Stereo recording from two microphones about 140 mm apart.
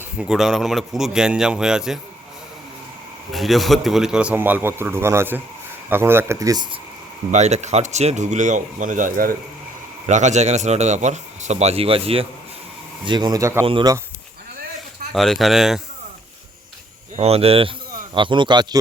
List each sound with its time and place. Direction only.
0.2 s a man's voice: 5° right (ahead or behind)
3.3 s a man's voice: centre (ahead or behind); by 6.7 s 25° right (ahead or behind)
7.3 s speech: 55° right (ahead or behind); by 9.3 s 80° right
10.1 s a man's voice: 60° right (ahead or behind); by 12.2 s 40° right (ahead or behind)
13.1 s speech: 30° right (ahead or behind)
13.7 s speech: 35° right (ahead or behind)
15.1 s a man's voice: centre (ahead or behind)
17.2 s a man's voice: 45° right (ahead or behind)